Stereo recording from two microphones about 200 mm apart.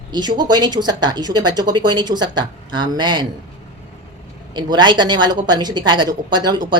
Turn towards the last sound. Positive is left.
turn(degrees=-20)  # may be behind; listen again after turning